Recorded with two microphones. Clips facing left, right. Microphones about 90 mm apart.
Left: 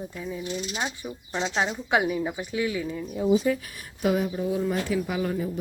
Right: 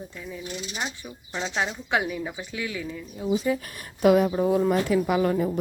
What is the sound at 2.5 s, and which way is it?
Speech, 25° left (ahead or behind).